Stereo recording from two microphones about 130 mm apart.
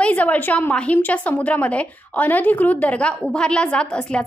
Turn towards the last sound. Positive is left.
turn(degrees=10)  # may be behind; listen again after turning